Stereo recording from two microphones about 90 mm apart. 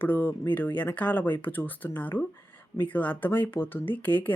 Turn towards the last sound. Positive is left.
turn(degrees=20)  # may be behind; listen again after turning